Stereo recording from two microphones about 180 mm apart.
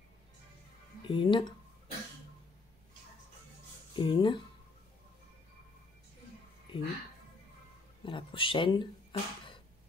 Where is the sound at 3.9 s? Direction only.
30° left (ahead or behind).